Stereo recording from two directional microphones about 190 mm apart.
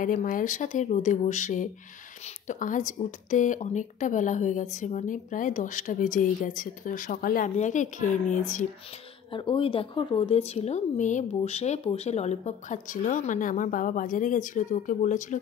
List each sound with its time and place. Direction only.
0.0 s speech: 45° left (ahead or behind)
9.3 s speech: 25° left (ahead or behind)